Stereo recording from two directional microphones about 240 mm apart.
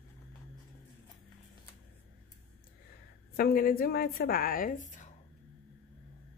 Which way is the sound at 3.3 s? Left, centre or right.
Left.